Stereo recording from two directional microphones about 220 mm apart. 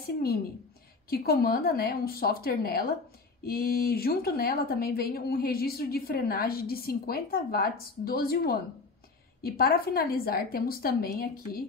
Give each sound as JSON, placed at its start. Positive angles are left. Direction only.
{"t": 1.1, "sound": "speech", "side_deg": 45}